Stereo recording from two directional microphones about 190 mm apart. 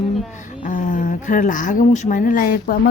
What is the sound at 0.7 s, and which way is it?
A woman's voice, 40° left (ahead or behind).